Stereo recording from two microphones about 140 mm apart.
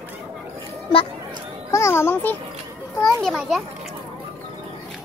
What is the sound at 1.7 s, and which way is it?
Speech, 20° left (ahead or behind).